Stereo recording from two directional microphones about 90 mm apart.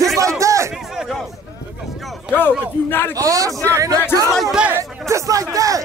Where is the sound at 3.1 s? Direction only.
40° right (ahead or behind).